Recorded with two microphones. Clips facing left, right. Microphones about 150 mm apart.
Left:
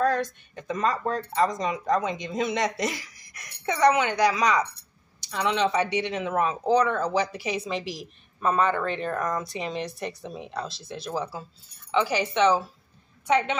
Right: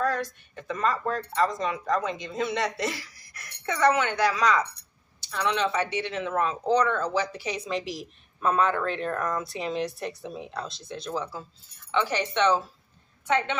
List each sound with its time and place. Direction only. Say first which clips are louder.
0.0 s a woman's voice: left 3 dB; 20° left (ahead or behind)